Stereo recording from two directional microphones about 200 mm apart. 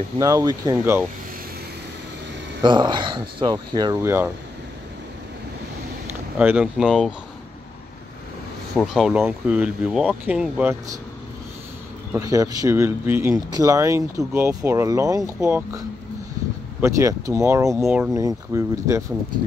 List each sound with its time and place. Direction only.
0.2 s speech: 15° right (ahead or behind)
2.6 s speech: 25° right (ahead or behind)
6.3 s speech: 5° right (ahead or behind)
8.7 s speech: centre (ahead or behind)
12.3 s speech: 15° right (ahead or behind)
16.8 s speech: 15° right (ahead or behind)